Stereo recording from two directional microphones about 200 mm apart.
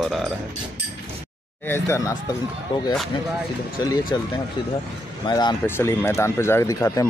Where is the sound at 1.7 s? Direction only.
15° left (ahead or behind).